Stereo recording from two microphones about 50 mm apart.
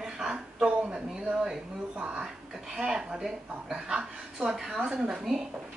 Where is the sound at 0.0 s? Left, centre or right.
Centre.